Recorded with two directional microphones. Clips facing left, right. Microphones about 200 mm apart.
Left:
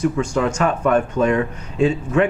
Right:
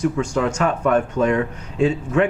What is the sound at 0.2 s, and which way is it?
A man's voice, 20° left (ahead or behind).